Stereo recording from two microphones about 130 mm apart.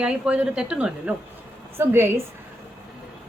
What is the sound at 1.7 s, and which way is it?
Speech, 20° right (ahead or behind).